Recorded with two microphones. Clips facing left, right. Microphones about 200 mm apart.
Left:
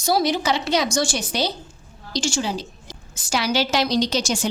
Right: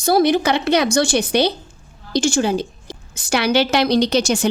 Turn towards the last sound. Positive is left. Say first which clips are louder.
# right 5 dB
turn(degrees=-60)  # may be behind; listen again after turning